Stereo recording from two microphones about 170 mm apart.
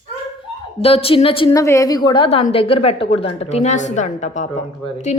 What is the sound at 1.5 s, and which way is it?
A woman's voice, 20° left (ahead or behind).